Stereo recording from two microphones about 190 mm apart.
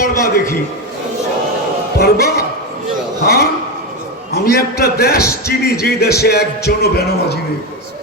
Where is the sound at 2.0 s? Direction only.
55° left (ahead or behind).